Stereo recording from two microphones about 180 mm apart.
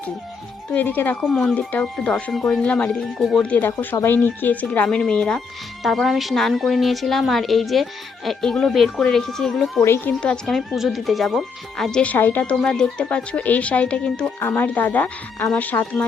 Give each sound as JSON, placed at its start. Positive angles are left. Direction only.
{"t": 0.7, "sound": "a woman's voice", "side_deg": 10}
{"t": 9.8, "sound": "speech", "side_deg": 10}